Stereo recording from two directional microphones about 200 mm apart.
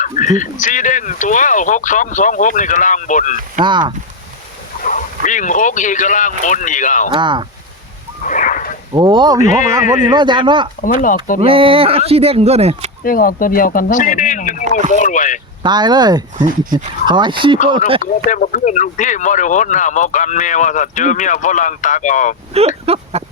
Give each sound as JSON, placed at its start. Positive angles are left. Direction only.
{"t": 0.0, "sound": "speech", "side_deg": 40}
{"t": 3.6, "sound": "speech", "side_deg": -25}
{"t": 4.8, "sound": "speech", "side_deg": 40}
{"t": 7.1, "sound": "speech", "side_deg": -25}
{"t": 8.2, "sound": "a sound", "side_deg": 40}
{"t": 8.9, "sound": "speech", "side_deg": -25}
{"t": 9.4, "sound": "speech", "side_deg": 40}
{"t": 10.0, "sound": "speech", "side_deg": -20}
{"t": 10.8, "sound": "speech", "side_deg": 40}
{"t": 11.3, "sound": "speech", "side_deg": -25}
{"t": 13.1, "sound": "speech", "side_deg": 45}
{"t": 15.6, "sound": "speech", "side_deg": -20}
{"t": 18.0, "sound": "speech", "side_deg": 40}
{"t": 22.5, "sound": "speech", "side_deg": -30}